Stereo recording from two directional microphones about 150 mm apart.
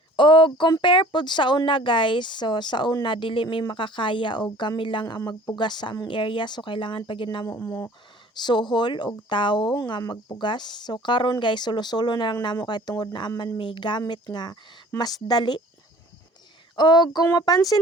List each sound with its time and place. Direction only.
0.2 s speech: 35° left (ahead or behind)
7.4 s speech: 20° left (ahead or behind)
8.4 s speech: 30° left (ahead or behind)
16.7 s speech: 30° left (ahead or behind)